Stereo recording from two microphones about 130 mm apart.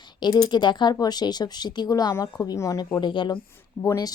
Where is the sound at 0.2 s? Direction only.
35° left (ahead or behind).